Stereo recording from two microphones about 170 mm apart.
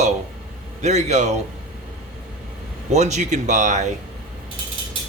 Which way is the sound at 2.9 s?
40° right (ahead or behind).